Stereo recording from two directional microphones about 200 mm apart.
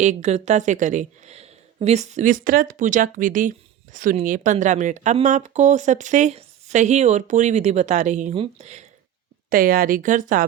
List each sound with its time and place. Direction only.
0.0 s speech: 35° right (ahead or behind)
9.5 s speech: 45° right (ahead or behind)